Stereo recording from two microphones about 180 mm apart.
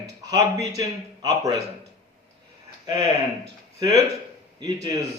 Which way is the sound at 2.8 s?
20° right (ahead or behind).